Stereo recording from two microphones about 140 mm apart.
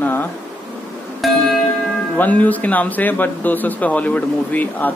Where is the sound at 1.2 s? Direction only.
Centre (ahead or behind).